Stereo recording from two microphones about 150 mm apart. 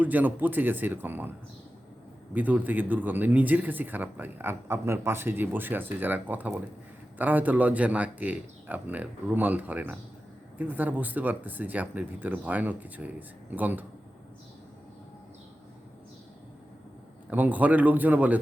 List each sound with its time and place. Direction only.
0.0 s speech: 10° right (ahead or behind)
2.3 s speech: 10° right (ahead or behind)
17.2 s speech: 10° right (ahead or behind)